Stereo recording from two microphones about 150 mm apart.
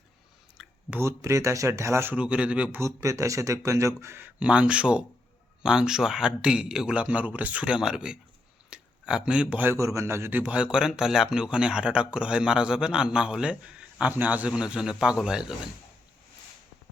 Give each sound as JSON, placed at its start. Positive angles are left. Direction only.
{"t": 0.6, "sound": "speech", "side_deg": -10}
{"t": 2.8, "sound": "a man's voice", "side_deg": -20}